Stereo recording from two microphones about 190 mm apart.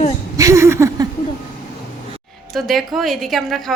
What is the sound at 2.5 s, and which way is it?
A woman's voice, centre (ahead or behind).